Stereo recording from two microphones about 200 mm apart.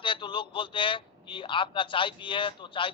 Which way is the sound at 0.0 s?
25° left (ahead or behind).